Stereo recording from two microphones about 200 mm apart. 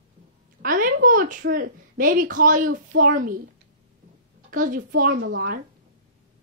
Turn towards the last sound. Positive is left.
turn(degrees=-65)  # may be behind; listen again after turning